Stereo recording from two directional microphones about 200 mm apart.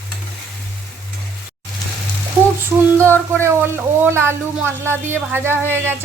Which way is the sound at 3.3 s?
10° right (ahead or behind).